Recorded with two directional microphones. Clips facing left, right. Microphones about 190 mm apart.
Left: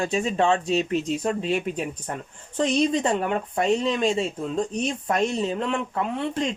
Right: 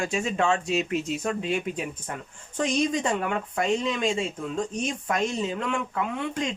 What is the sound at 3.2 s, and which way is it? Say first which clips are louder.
Speech: left 3 dB; 35° left (ahead or behind).